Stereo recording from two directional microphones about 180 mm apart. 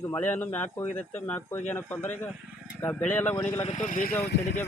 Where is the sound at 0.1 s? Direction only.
10° left (ahead or behind).